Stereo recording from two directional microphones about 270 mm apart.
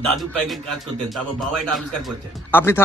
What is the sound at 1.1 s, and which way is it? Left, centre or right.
Speech, centre.